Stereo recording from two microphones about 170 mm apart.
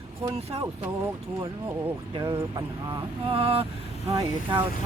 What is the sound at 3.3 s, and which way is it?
Speech, 35° right (ahead or behind).